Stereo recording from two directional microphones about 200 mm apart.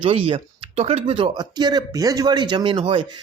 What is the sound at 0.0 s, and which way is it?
Speech, 25° right (ahead or behind).